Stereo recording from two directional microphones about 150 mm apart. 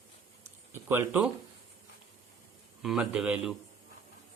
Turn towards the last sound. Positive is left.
turn(degrees=-5)  # may be behind; listen again after turning